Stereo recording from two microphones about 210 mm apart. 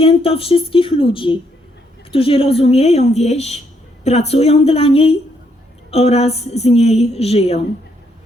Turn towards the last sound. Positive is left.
turn(degrees=30)  # may be behind; listen again after turning